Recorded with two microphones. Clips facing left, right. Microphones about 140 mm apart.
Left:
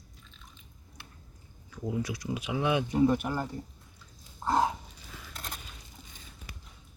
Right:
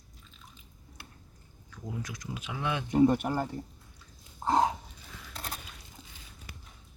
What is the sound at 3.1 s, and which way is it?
Speech, 40° right (ahead or behind).